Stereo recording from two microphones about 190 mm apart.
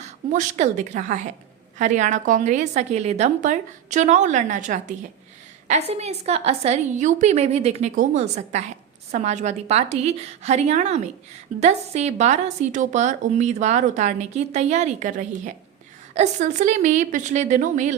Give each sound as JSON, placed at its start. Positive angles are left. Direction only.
{"t": 0.0, "sound": "a woman's voice", "side_deg": -40}